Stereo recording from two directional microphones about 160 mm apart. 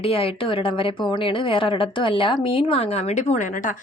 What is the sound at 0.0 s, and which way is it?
Speech, 35° left (ahead or behind).